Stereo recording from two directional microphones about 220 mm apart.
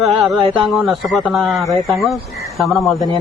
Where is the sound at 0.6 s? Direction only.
Centre (ahead or behind).